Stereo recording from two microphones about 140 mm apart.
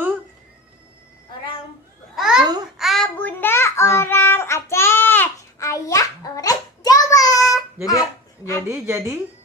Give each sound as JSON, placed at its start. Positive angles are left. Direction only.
{"t": 2.1, "sound": "babbling", "side_deg": -5}
{"t": 2.8, "sound": "child singing", "side_deg": 0}
{"t": 3.2, "sound": "child singing", "side_deg": 15}
{"t": 8.6, "sound": "a woman's voice", "side_deg": -20}